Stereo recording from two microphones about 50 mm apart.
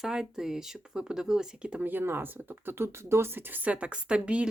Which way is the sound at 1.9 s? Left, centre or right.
Right.